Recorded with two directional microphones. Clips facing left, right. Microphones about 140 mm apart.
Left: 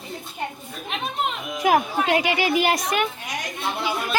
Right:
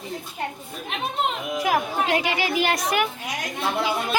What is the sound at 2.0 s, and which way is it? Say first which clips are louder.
Speech: left 2 dB; 15° left (ahead or behind).